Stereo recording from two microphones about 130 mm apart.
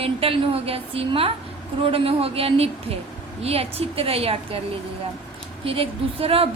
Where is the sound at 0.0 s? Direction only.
45° right (ahead or behind).